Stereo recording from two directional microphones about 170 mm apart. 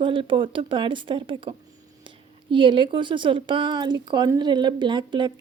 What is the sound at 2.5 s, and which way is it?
Speech, 30° right (ahead or behind).